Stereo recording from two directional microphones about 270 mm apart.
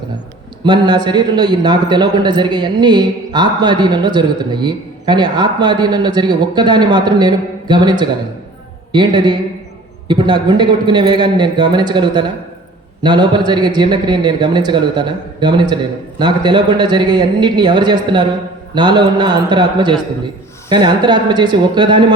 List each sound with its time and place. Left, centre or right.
0.6 s a man's voice: centre